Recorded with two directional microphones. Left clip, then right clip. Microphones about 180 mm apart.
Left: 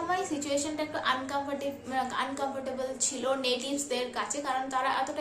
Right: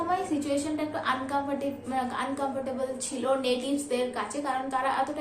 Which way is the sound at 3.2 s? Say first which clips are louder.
Right 3 dB; 20° left (ahead or behind).